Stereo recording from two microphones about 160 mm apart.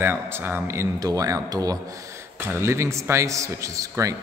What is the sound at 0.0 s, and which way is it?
A man's voice, 15° right (ahead or behind).